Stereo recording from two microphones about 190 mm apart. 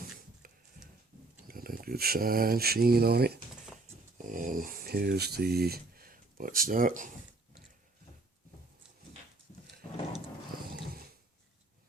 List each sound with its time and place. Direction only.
0.4 s a sound: 50° right (ahead or behind)
1.5 s speech: 50° right (ahead or behind)
4.3 s speech: 45° right (ahead or behind)